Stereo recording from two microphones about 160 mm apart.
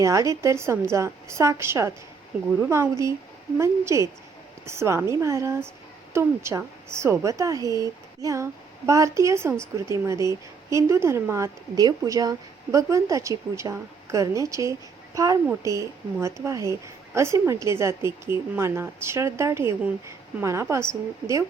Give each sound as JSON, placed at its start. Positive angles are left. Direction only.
{"t": 0.0, "sound": "a woman's voice", "side_deg": -20}